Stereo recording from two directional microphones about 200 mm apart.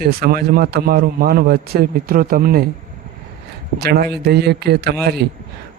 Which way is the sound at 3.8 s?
55° right (ahead or behind).